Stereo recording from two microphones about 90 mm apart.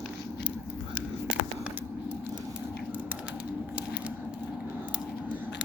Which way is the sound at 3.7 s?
15° right (ahead or behind).